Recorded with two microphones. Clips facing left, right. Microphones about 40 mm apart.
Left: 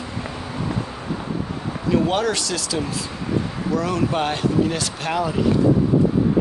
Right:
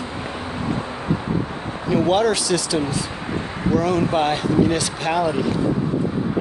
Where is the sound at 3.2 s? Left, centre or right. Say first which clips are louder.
Left 4 dB; right.